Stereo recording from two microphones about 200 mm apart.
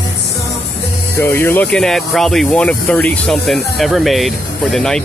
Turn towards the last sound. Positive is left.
turn(degrees=0)  # may be behind; listen again after turning